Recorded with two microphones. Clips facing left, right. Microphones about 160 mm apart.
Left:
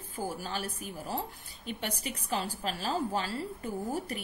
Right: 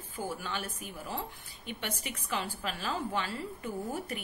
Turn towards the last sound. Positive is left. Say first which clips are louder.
# left 2 dB
turn(degrees=40)  # may be behind; listen again after turning